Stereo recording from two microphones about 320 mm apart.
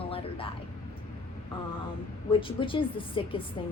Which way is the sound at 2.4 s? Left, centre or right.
Centre.